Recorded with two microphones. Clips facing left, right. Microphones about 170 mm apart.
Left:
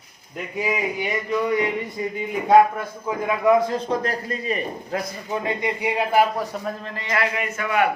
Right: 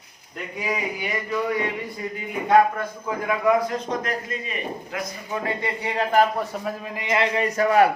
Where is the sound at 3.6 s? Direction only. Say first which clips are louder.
Left 3 dB; 30° left (ahead or behind).